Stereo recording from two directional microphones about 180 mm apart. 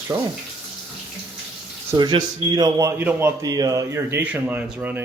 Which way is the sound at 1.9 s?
25° right (ahead or behind).